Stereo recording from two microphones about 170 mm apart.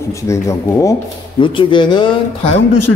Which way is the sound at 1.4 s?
30° left (ahead or behind).